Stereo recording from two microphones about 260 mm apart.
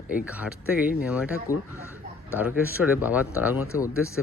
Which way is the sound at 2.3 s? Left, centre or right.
Centre.